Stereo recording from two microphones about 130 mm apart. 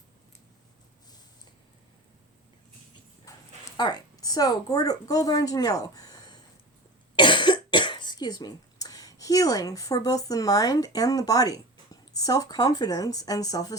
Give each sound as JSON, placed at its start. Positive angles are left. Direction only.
{"t": 3.8, "sound": "a woman's voice", "side_deg": 35}